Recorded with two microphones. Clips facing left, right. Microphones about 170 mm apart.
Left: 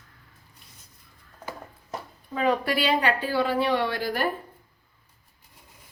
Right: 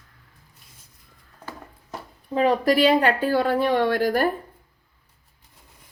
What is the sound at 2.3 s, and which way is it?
A woman's voice, 40° right (ahead or behind).